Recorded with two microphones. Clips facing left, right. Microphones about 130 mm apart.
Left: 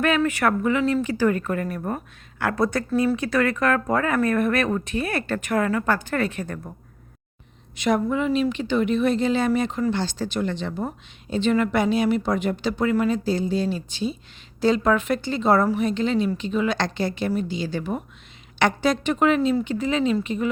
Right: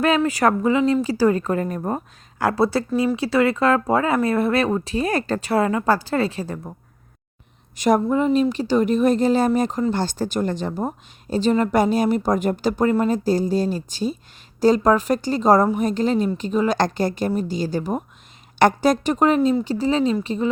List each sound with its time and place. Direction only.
0.3 s speech: 35° right (ahead or behind); by 1.0 s 20° right (ahead or behind)
1.0 s speech: 35° right (ahead or behind)
2.9 s speech: 15° right (ahead or behind)
3.2 s speech: 25° right (ahead or behind)
7.8 s speech: 45° right (ahead or behind)